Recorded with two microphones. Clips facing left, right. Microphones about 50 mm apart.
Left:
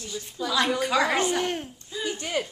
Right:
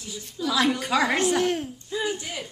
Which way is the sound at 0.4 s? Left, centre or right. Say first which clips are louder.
Right 1 dB; centre.